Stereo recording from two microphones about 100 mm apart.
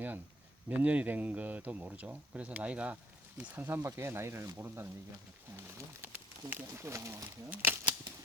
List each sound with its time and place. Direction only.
0.7 s speech: 15° right (ahead or behind)